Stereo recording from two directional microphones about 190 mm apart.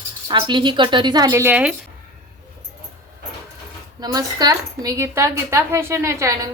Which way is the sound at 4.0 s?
20° right (ahead or behind).